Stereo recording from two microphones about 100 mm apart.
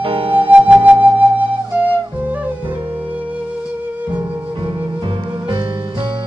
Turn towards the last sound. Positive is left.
turn(degrees=-60)  # may be behind; listen again after turning